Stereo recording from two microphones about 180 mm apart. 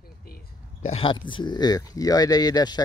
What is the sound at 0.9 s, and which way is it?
Speech, 30° left (ahead or behind).